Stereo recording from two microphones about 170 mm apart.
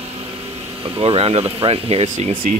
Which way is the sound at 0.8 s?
30° right (ahead or behind).